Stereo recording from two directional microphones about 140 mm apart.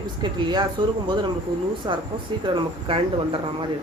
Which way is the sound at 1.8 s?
30° right (ahead or behind).